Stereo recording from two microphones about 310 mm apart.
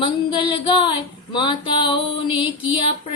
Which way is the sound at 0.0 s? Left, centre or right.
Centre.